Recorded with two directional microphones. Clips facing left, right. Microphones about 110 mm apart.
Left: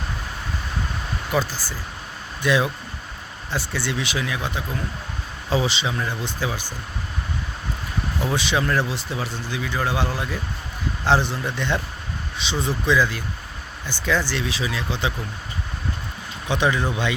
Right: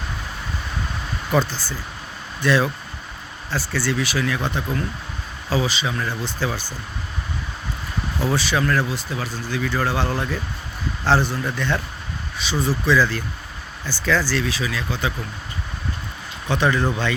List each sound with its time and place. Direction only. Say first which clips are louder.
1.3 s speech: right 3 dB; 5° left (ahead or behind)
4.4 s speech: right 3 dB; 5° left (ahead or behind)
5.5 s speech: even; 25° left (ahead or behind)
8.4 s speech: even; 20° left (ahead or behind)
16.5 s speech: right 2 dB; 15° left (ahead or behind)